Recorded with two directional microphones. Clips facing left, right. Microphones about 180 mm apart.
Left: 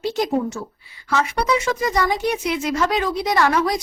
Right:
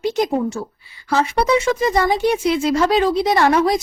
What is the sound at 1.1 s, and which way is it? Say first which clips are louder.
Speech: right 3 dB; 30° right (ahead or behind).